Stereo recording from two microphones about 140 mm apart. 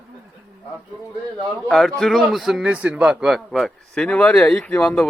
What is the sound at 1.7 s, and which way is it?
A man's voice, centre (ahead or behind).